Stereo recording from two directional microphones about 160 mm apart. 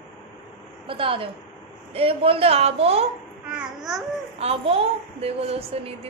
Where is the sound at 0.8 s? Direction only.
35° right (ahead or behind).